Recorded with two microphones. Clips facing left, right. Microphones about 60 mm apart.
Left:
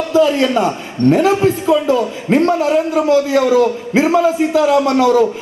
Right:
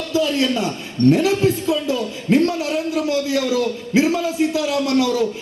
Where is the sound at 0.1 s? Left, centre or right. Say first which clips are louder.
Left 6 dB; left.